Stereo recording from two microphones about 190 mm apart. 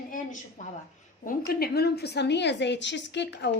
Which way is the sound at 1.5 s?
55° left (ahead or behind).